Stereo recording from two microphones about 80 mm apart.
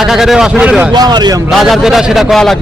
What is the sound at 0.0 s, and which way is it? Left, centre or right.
Speech, centre.